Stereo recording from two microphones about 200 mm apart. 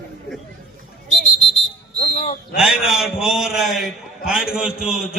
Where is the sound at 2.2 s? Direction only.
35° left (ahead or behind).